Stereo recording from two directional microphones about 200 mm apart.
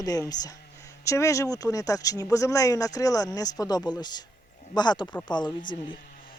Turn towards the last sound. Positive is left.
turn(degrees=25)  # may be behind; listen again after turning